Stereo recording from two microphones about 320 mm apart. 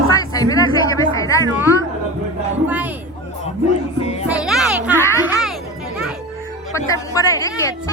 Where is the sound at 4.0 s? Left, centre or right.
Centre.